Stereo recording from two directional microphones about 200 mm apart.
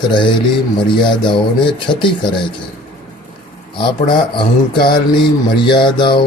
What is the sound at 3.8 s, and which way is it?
Speech, 25° left (ahead or behind).